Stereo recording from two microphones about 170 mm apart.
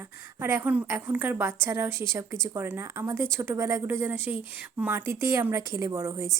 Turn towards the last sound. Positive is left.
turn(degrees=-15)  # may be behind; listen again after turning